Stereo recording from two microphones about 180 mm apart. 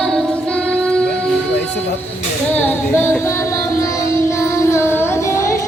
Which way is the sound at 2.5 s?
10° left (ahead or behind).